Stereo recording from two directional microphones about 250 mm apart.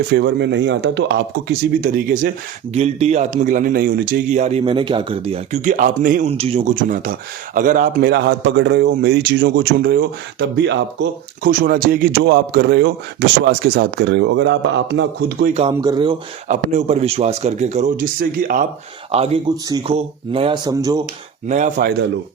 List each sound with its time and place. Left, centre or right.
0.1 s a man's voice: right
15.7 s speech: centre
16.5 s a man's voice: right
21.4 s a man's voice: right